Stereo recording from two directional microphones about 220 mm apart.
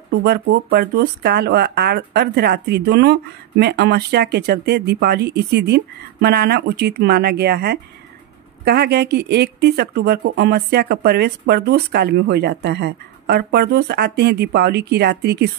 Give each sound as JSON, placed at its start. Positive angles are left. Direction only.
{"t": 0.1, "sound": "speech", "side_deg": -50}